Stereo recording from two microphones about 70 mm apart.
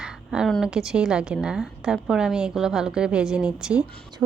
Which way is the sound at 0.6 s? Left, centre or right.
Centre.